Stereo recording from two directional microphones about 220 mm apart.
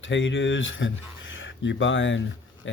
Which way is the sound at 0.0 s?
60° left (ahead or behind).